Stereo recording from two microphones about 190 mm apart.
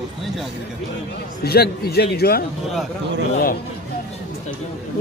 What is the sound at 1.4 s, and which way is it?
A man's voice, 55° left (ahead or behind).